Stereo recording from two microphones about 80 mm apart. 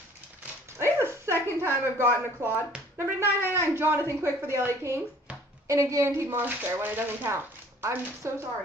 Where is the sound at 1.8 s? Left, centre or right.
Right.